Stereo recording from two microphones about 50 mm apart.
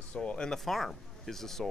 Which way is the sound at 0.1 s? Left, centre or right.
Left.